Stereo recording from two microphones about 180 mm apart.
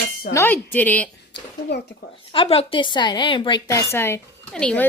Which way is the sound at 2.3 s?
30° left (ahead or behind).